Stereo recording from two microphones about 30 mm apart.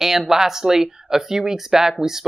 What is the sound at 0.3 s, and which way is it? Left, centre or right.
Speech, centre.